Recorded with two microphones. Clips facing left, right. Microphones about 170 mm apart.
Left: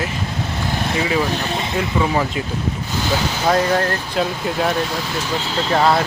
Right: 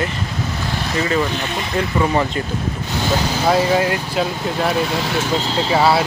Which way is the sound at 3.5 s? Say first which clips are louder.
Right 1 dB; 5° right (ahead or behind).